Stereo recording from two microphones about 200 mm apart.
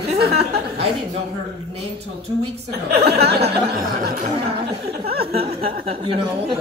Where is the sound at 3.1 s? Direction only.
55° right (ahead or behind).